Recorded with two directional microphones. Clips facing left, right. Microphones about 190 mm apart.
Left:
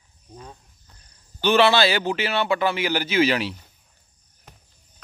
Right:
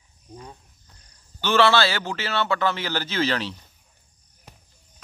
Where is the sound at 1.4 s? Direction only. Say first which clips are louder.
Left 2 dB; 15° left (ahead or behind).